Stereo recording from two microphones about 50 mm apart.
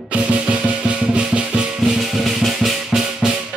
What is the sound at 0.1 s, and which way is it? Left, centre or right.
Music, right.